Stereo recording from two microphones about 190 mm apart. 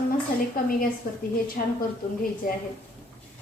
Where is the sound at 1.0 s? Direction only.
50° left (ahead or behind).